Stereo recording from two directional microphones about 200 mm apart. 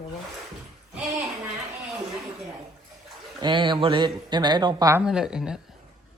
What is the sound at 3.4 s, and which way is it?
Speech, 25° right (ahead or behind).